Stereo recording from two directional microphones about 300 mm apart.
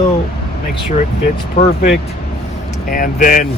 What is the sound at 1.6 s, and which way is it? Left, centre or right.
Speech, left.